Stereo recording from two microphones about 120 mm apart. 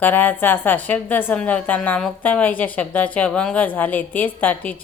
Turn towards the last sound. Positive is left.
turn(degrees=15)  # may be behind; listen again after turning